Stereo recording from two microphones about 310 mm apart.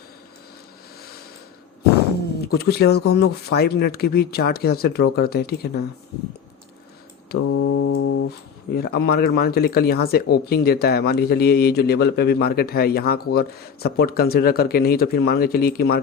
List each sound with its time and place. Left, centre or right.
2.4 s speech: left
7.3 s speech: left